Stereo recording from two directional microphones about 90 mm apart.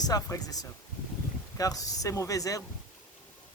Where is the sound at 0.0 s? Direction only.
45° left (ahead or behind).